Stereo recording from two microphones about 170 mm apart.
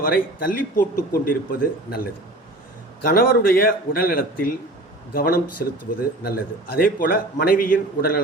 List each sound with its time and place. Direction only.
0.0 s speech: 60° left (ahead or behind)